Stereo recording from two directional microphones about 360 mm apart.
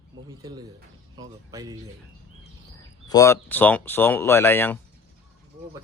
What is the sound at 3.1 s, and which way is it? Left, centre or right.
Speech, centre.